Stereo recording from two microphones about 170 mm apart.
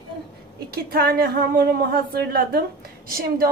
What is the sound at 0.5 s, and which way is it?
A woman's voice, 65° right (ahead or behind).